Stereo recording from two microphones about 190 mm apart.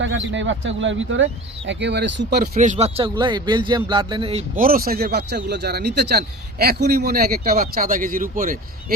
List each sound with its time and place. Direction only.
0.0 s speech: 80° right
2.6 s speech: 35° right (ahead or behind)
4.5 s speech: 50° right (ahead or behind)